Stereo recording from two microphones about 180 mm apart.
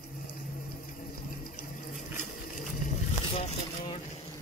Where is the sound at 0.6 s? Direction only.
50° left (ahead or behind).